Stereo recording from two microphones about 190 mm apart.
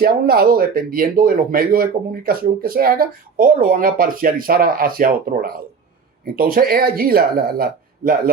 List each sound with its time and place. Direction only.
0.0 s speech: 50° right (ahead or behind)